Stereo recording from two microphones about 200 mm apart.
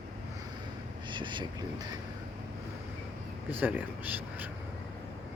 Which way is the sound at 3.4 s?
10° right (ahead or behind).